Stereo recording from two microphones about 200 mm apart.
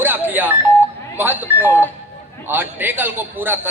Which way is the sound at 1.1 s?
10° right (ahead or behind).